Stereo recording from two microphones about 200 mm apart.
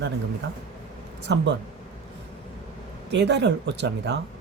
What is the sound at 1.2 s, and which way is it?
Speech, 60° right (ahead or behind).